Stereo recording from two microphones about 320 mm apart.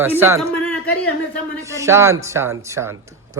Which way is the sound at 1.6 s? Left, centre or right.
Centre.